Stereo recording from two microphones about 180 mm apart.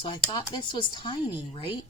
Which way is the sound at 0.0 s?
25° left (ahead or behind).